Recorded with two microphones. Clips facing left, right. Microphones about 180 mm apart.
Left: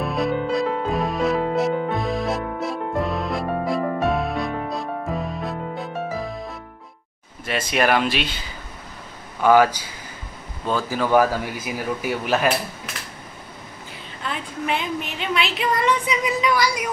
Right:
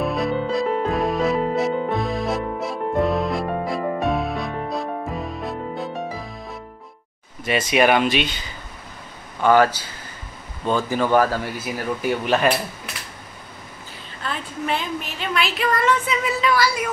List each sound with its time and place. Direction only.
0.0 s music: centre (ahead or behind)
7.4 s speech: centre (ahead or behind)
9.4 s speech: 10° left (ahead or behind)
15.1 s speech: 20° left (ahead or behind)